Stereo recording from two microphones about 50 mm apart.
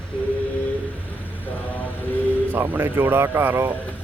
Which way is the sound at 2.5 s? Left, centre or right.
Right.